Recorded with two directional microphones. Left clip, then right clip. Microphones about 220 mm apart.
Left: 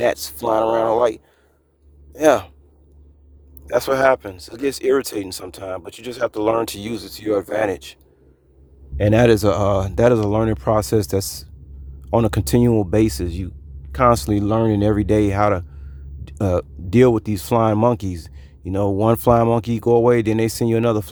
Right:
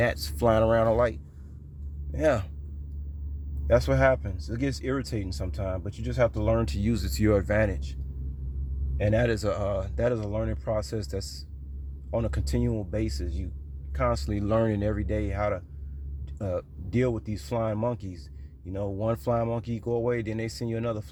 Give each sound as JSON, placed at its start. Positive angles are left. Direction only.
{"t": 0.1, "sound": "speech", "side_deg": 30}
{"t": 2.1, "sound": "speech", "side_deg": 35}
{"t": 3.8, "sound": "speech", "side_deg": 45}
{"t": 9.0, "sound": "speech", "side_deg": 35}
{"t": 14.3, "sound": "speech", "side_deg": 20}